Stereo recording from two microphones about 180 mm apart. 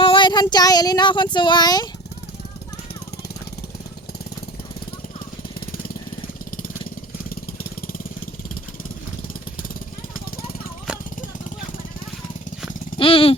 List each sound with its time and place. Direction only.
0.0 s speech: 25° left (ahead or behind)
5.5 s jackhammer: 55° left (ahead or behind)
7.3 s vehicle: 55° left (ahead or behind)
8.4 s jackhammer: 50° left (ahead or behind)
13.0 s a sound: 30° left (ahead or behind)